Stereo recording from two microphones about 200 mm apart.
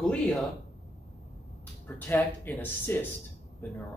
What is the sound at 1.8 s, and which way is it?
Speech, 10° left (ahead or behind).